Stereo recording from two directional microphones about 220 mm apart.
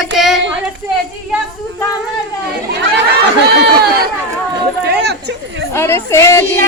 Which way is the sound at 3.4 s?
45° right (ahead or behind).